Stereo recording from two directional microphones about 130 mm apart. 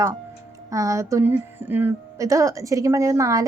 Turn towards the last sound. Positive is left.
turn(degrees=-25)  # may be behind; listen again after turning